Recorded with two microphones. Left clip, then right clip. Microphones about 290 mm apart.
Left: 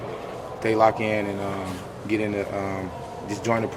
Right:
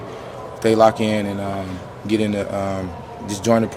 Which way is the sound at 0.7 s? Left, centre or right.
Right.